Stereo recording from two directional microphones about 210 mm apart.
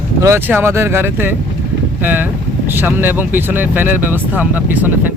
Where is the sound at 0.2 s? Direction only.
10° right (ahead or behind).